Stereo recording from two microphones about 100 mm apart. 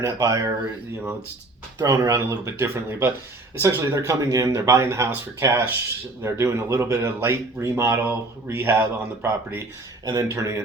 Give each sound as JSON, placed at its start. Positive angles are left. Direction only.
{"t": 0.0, "sound": "speech", "side_deg": -35}
{"t": 1.8, "sound": "speech", "side_deg": -40}
{"t": 2.0, "sound": "speech", "side_deg": -30}
{"t": 10.1, "sound": "speech", "side_deg": -35}